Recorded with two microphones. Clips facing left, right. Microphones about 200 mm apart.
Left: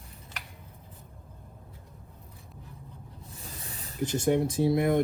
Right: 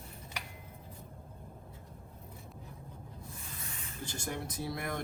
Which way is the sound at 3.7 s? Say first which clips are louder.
Left 3 dB; 35° left (ahead or behind).